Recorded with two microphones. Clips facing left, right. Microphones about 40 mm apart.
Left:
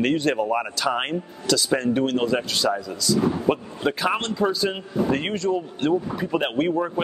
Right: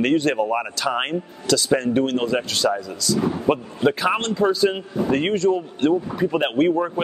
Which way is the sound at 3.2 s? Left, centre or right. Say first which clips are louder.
Right 1 dB; centre.